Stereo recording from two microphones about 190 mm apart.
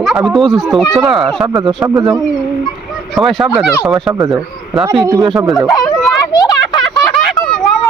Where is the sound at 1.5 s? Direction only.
20° right (ahead or behind).